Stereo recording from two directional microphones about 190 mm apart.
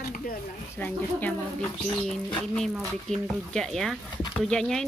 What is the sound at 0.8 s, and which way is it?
Speech, 10° left (ahead or behind).